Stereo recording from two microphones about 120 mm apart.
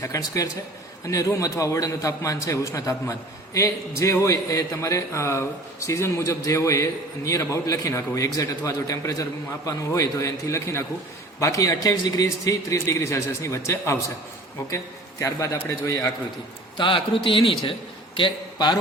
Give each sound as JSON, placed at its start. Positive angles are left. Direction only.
{"t": 0.0, "sound": "a man's voice", "side_deg": 25}
{"t": 15.2, "sound": "a man's voice", "side_deg": 25}
{"t": 16.7, "sound": "a man's voice", "side_deg": 45}